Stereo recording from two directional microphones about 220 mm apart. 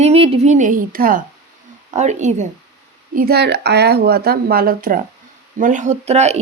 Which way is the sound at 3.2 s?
45° right (ahead or behind).